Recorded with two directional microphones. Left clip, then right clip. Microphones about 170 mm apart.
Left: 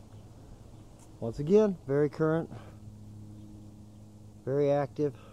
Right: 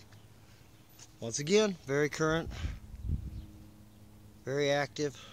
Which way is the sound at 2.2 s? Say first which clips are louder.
Left 1 dB; 40° right (ahead or behind).